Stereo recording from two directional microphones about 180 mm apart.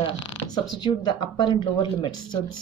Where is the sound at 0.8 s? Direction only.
25° left (ahead or behind).